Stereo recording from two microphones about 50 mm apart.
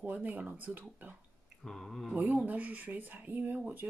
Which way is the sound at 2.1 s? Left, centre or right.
Right.